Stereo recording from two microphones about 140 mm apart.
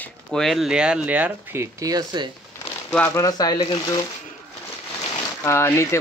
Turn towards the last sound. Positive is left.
turn(degrees=20)  # may be behind; listen again after turning